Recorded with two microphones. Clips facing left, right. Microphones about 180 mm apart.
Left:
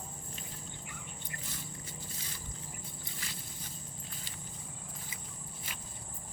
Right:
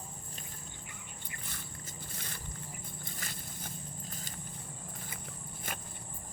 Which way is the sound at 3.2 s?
50° right (ahead or behind).